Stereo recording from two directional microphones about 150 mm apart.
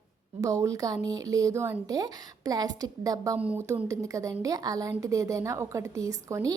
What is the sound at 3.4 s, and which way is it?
A woman's voice, 15° right (ahead or behind).